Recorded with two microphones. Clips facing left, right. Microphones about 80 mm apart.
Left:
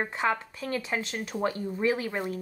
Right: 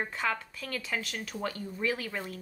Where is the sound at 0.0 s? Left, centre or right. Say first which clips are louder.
Left 4 dB; left.